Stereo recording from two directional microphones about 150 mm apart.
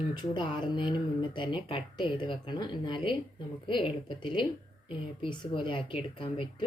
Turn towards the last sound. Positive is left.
turn(degrees=35)  # may be behind; listen again after turning